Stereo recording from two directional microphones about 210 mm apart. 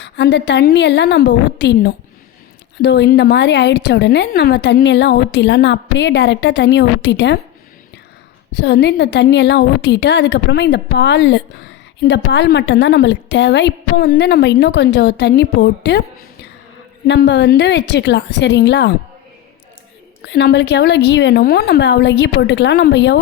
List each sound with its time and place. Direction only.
0.0 s a woman's voice: 55° left (ahead or behind)
8.5 s a woman's voice: 50° left (ahead or behind)
17.1 s a woman's voice: 55° left (ahead or behind)
20.2 s a woman's voice: 55° left (ahead or behind)